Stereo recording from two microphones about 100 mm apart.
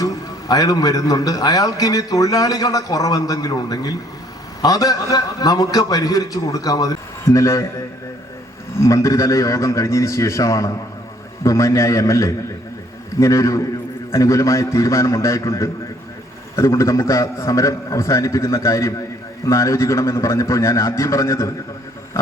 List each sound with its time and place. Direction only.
0.0 s a man's voice: 35° left (ahead or behind)
8.7 s a man's voice: 30° left (ahead or behind)